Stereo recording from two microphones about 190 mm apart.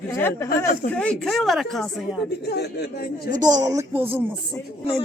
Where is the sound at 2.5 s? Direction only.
60° left (ahead or behind).